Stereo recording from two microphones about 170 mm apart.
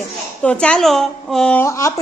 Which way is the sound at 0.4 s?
5° left (ahead or behind).